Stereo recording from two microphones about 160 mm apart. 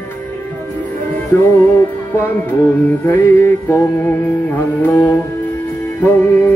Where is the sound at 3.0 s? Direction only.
15° left (ahead or behind).